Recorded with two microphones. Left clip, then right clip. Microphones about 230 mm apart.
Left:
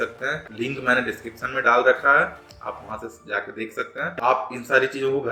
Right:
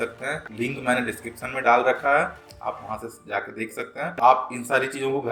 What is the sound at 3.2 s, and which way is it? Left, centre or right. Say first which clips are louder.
Speech: left 1 dB; right.